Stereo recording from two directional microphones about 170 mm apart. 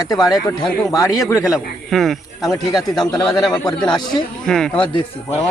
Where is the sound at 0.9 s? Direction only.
20° left (ahead or behind).